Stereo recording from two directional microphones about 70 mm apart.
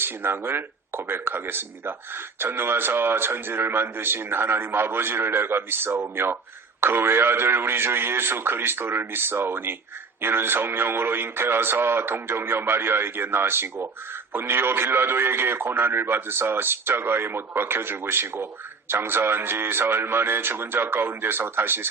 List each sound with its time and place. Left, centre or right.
0.0 s speech: right